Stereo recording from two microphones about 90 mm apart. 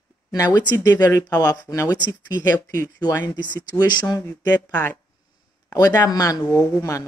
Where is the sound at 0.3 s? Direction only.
50° left (ahead or behind).